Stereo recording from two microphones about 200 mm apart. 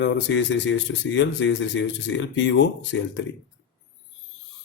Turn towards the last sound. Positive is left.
turn(degrees=65)  # may be behind; listen again after turning